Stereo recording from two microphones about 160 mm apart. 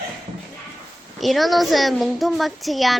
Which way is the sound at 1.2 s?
Centre (ahead or behind).